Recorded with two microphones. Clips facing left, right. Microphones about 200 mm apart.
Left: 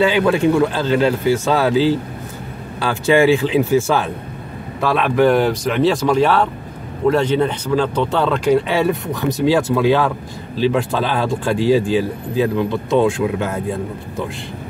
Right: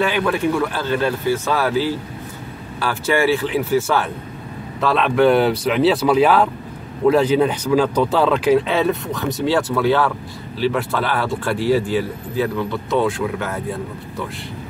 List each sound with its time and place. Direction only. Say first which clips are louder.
0.0 s speech: left 4 dB; 25° left (ahead or behind)
4.7 s a man's voice: left 1 dB; 5° left (ahead or behind)
9.4 s speech: left 3 dB; 15° left (ahead or behind)